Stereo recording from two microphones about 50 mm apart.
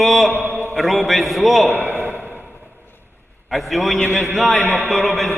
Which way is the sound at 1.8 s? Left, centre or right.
Right.